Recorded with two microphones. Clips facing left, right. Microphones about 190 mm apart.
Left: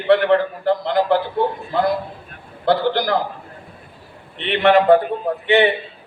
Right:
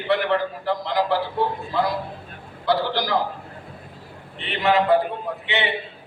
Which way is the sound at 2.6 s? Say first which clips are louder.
Left 5 dB; 55° left (ahead or behind).